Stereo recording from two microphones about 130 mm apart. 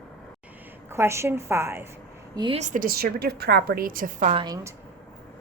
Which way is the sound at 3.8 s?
90° right.